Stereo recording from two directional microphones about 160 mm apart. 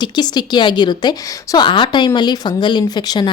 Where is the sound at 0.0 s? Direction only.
25° left (ahead or behind).